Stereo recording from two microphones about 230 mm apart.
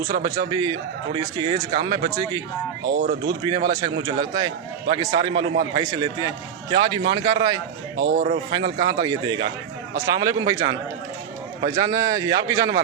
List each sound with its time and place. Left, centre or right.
0.2 s a man's voice: centre
2.8 s speech: right
3.4 s a man's voice: centre
7.9 s a man's voice: right
8.5 s a man's voice: centre
11.6 s a man's voice: centre